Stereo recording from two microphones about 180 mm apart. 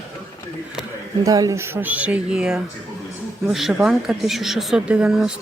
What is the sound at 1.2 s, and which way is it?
Speech, 20° right (ahead or behind).